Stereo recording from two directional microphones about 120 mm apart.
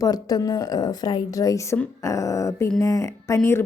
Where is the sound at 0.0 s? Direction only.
30° left (ahead or behind).